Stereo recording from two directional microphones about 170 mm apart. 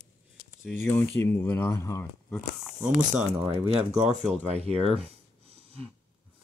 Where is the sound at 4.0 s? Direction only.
40° right (ahead or behind).